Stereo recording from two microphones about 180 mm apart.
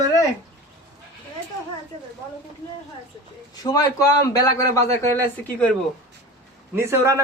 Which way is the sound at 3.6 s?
20° left (ahead or behind).